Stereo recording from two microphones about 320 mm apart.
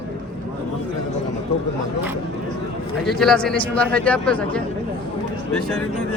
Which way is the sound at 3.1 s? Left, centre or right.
Centre.